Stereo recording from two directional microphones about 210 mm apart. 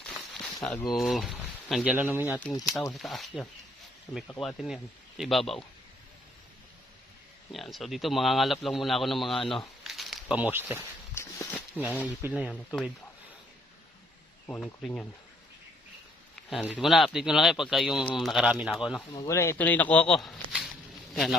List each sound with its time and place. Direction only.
0.0 s speech: 5° left (ahead or behind)
2.5 s speech: 20° left (ahead or behind)
2.9 s a man's voice: centre (ahead or behind)
7.5 s a man's voice: centre (ahead or behind)
9.8 s a sound: centre (ahead or behind)
11.1 s a sound: 10° left (ahead or behind)
12.2 s speech: 10° right (ahead or behind)
14.4 s a man's voice: 5° left (ahead or behind)
16.3 s a man's voice: centre (ahead or behind)
19.1 s a man's voice: 15° left (ahead or behind); by 21.3 s centre (ahead or behind)